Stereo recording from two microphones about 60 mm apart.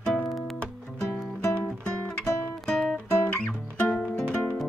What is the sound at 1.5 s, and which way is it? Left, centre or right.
Music, centre.